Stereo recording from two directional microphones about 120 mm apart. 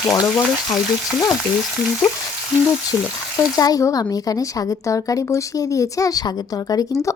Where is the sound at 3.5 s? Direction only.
30° left (ahead or behind).